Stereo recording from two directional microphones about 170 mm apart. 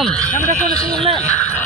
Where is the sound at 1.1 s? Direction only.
5° left (ahead or behind).